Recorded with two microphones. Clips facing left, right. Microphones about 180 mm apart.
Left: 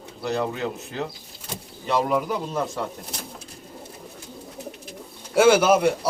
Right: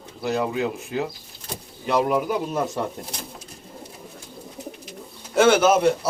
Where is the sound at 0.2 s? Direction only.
5° right (ahead or behind).